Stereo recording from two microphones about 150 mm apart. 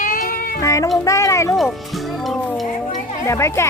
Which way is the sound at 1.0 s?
20° left (ahead or behind).